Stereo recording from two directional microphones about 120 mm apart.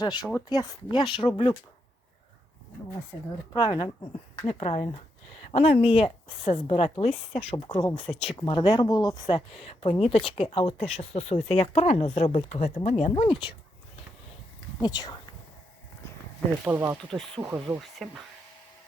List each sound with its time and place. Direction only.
0.0 s speech: 35° left (ahead or behind)
0.9 s speech: 40° left (ahead or behind)
3.5 s speech: 40° left (ahead or behind)
4.4 s speech: 50° left (ahead or behind)
7.5 s speech: 40° left (ahead or behind); by 13.1 s 65° left (ahead or behind)
13.1 s speech: 45° left (ahead or behind)
14.8 s speech: 35° left (ahead or behind)
16.6 s speech: 20° right (ahead or behind)
17.1 s speech: 5° left (ahead or behind)